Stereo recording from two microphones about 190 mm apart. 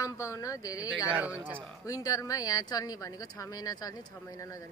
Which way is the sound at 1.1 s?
10° right (ahead or behind).